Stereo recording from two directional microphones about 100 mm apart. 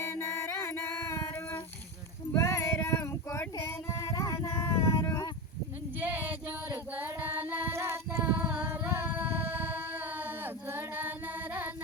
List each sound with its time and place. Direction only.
0.1 s music: 30° left (ahead or behind)
2.3 s child singing: 25° left (ahead or behind)
6.0 s female singing: 15° right (ahead or behind)
8.7 s a sound: 20° right (ahead or behind)